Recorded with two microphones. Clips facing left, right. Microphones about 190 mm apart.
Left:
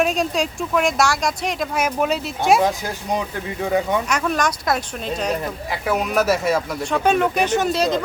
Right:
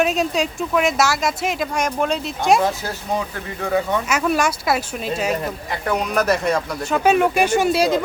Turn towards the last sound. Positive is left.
turn(degrees=-10)  # may be behind; listen again after turning